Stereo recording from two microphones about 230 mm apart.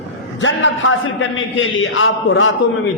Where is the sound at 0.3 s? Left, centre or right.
Left.